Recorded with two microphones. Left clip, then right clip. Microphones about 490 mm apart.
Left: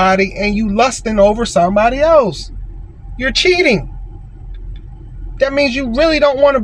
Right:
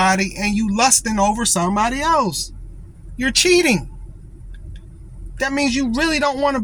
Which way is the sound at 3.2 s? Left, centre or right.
Right.